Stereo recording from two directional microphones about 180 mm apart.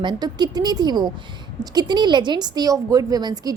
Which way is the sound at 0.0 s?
25° right (ahead or behind).